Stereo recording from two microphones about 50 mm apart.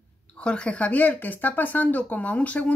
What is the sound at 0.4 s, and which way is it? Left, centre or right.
Speech, centre.